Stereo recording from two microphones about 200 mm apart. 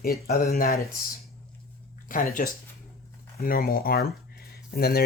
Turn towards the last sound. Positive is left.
turn(degrees=50)  # may be behind; listen again after turning